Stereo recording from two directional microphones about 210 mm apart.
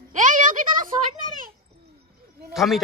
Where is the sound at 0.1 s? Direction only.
40° right (ahead or behind).